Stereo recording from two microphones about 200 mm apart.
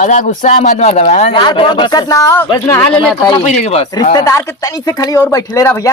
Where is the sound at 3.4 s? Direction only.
35° left (ahead or behind).